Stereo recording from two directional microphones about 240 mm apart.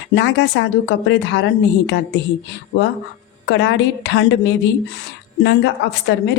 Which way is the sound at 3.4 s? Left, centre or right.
Left.